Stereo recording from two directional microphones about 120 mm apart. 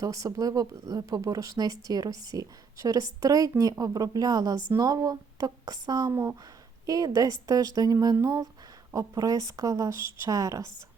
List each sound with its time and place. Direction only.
0.0 s speech: 30° right (ahead or behind)